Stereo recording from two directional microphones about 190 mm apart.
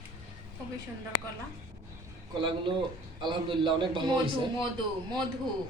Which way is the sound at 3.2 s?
25° right (ahead or behind).